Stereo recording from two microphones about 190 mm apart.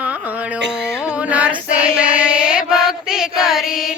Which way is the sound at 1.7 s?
5° right (ahead or behind).